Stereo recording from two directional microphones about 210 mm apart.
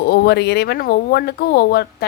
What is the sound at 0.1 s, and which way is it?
Speech, 50° left (ahead or behind).